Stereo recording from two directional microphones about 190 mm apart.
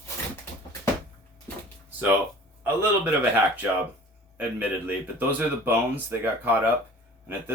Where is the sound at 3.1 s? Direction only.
10° right (ahead or behind).